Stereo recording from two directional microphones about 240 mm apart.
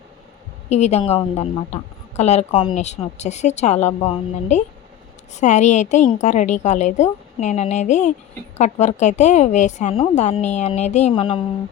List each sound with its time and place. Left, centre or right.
0.7 s a woman's voice: left